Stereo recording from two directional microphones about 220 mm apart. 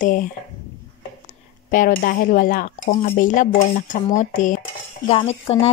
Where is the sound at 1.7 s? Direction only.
40° left (ahead or behind).